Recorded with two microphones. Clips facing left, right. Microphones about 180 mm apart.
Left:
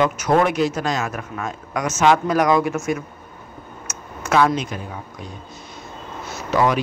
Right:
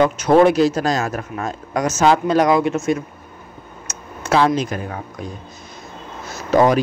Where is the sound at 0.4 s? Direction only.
35° right (ahead or behind).